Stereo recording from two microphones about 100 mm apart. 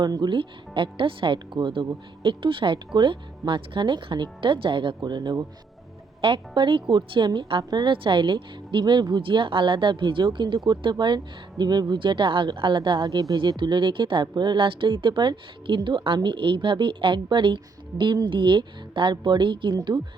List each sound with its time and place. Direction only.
0.0 s speech: 45° right (ahead or behind)
5.0 s speech: 45° right (ahead or behind)
6.2 s speech: 55° right (ahead or behind)
13.1 s speech: 35° right (ahead or behind)
13.3 s speech: 55° right (ahead or behind)